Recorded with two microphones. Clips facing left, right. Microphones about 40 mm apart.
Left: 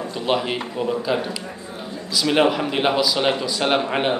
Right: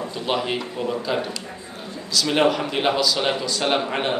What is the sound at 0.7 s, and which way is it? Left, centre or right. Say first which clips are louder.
Speech: left 4 dB; centre.